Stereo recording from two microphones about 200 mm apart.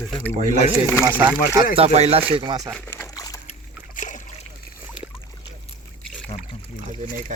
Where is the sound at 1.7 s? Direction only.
30° right (ahead or behind).